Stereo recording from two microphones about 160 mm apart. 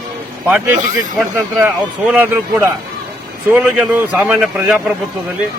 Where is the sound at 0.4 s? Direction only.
10° right (ahead or behind).